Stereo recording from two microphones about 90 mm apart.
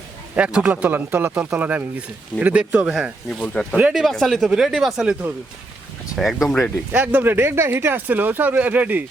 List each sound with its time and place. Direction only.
0.3 s speech: 15° right (ahead or behind)
3.4 s speech: 10° left (ahead or behind)
6.1 s speech: centre (ahead or behind)
6.9 s speech: 15° right (ahead or behind)